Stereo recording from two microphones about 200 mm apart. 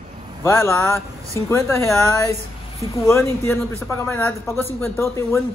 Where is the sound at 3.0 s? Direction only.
15° left (ahead or behind).